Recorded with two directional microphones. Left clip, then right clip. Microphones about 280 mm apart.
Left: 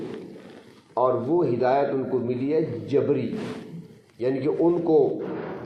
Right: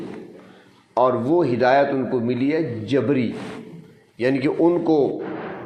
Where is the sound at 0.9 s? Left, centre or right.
Right.